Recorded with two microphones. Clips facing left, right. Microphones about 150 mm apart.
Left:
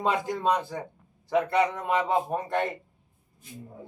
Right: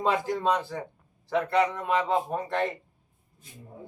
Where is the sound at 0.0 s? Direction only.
20° left (ahead or behind).